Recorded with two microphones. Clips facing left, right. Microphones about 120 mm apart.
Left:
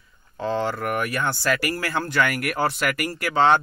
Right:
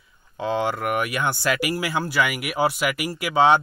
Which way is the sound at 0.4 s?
15° right (ahead or behind).